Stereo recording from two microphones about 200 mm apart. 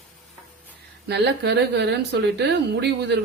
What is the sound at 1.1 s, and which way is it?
A woman's voice, 60° right (ahead or behind).